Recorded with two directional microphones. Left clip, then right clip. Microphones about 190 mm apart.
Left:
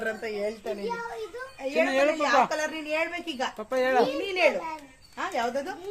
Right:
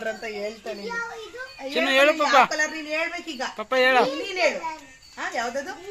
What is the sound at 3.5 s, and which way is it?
A child's voice, centre (ahead or behind).